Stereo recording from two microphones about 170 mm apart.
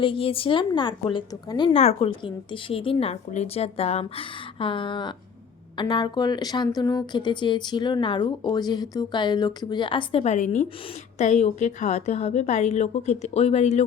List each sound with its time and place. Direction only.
0.0 s a woman's voice: 30° left (ahead or behind)